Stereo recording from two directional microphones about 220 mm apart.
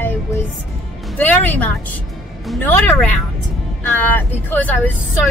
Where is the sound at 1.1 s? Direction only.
10° left (ahead or behind).